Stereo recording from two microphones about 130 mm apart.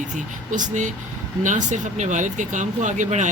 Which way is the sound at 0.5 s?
75° right (ahead or behind).